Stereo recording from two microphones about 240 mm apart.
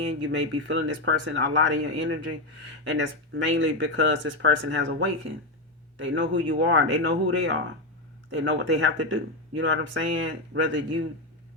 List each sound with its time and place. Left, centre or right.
0.2 s speech: right